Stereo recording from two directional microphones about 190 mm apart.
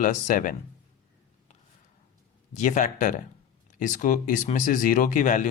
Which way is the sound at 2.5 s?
40° left (ahead or behind).